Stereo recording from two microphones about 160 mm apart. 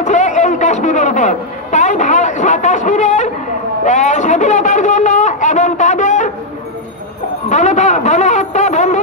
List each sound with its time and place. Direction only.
0.0 s a man's voice: 45° left (ahead or behind)
7.4 s a man's voice: 50° left (ahead or behind)